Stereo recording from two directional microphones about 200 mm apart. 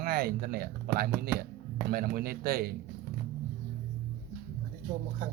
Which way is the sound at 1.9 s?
50° right (ahead or behind).